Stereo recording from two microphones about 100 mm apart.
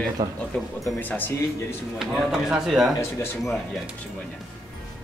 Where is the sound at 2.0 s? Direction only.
5° right (ahead or behind).